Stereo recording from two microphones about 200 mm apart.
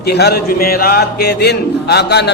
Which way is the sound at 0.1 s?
55° left (ahead or behind).